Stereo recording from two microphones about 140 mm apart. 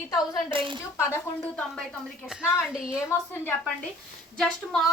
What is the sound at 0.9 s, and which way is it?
Speech, 15° left (ahead or behind).